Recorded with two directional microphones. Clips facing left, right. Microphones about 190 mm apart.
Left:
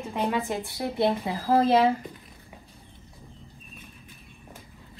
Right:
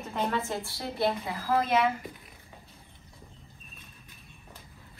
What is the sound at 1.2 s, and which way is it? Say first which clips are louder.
Speech: left 6 dB; 30° left (ahead or behind).